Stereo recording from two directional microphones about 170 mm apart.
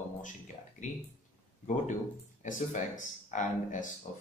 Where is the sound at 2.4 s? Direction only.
45° left (ahead or behind).